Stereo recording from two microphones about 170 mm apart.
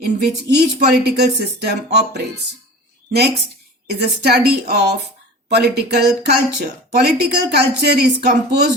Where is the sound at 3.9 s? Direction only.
70° right (ahead or behind).